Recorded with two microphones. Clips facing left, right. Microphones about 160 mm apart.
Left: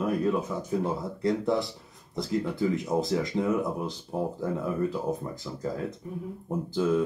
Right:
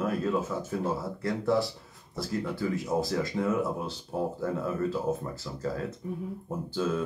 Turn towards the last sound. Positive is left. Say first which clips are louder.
# left 4 dB
turn(degrees=15)  # may be behind; listen again after turning